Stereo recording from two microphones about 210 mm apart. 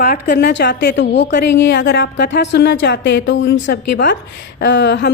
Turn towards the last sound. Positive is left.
turn(degrees=55)  # may be behind; listen again after turning